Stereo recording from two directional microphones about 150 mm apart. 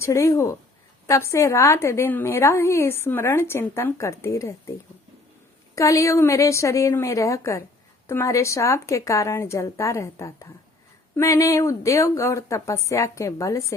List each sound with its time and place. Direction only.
0.0 s a woman's voice: 20° left (ahead or behind)
5.7 s speech: 20° left (ahead or behind)